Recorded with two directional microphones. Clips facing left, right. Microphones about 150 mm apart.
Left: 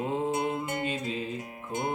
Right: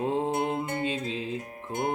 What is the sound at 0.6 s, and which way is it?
Music, 25° right (ahead or behind).